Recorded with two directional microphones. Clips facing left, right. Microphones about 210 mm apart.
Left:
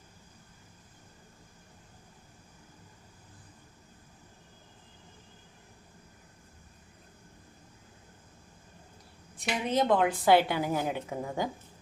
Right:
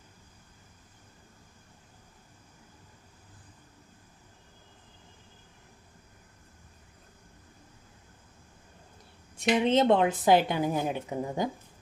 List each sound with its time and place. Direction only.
9.4 s a woman's voice: 25° right (ahead or behind)